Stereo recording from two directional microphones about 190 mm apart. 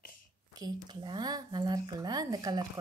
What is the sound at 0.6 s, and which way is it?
Speech, 20° right (ahead or behind).